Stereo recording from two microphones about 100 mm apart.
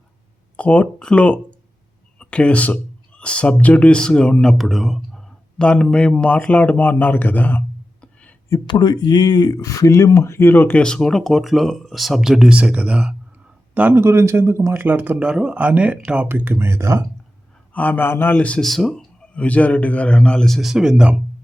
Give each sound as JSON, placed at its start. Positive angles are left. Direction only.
{"t": 0.5, "sound": "speech", "side_deg": 10}
{"t": 2.1, "sound": "a sound", "side_deg": 10}
{"t": 3.2, "sound": "speech", "side_deg": 10}
{"t": 8.6, "sound": "speech", "side_deg": 50}
{"t": 13.7, "sound": "a man's voice", "side_deg": -20}
{"t": 15.3, "sound": "speech", "side_deg": -10}
{"t": 17.7, "sound": "speech", "side_deg": 20}